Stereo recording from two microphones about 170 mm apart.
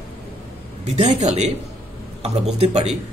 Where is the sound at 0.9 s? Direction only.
40° right (ahead or behind).